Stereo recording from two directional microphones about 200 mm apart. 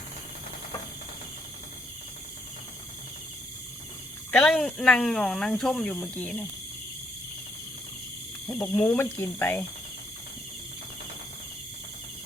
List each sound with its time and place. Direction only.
4.3 s speech: 5° left (ahead or behind)
8.4 s speech: 10° left (ahead or behind)